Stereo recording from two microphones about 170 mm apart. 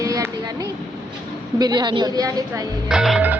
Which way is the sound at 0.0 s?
20° right (ahead or behind).